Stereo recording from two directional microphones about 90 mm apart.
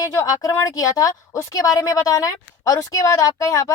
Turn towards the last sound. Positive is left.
turn(degrees=40)  # may be behind; listen again after turning